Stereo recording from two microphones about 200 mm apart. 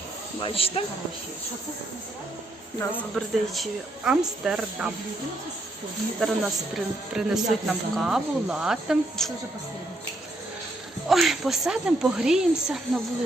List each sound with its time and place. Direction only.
0.4 s speech: 30° left (ahead or behind)
2.9 s speech: centre (ahead or behind)
6.1 s speech: centre (ahead or behind)
11.1 s speech: centre (ahead or behind)